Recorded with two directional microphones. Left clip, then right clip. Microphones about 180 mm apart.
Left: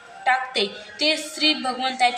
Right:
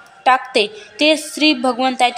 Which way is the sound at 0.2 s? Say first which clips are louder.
Right 7 dB; 45° right (ahead or behind).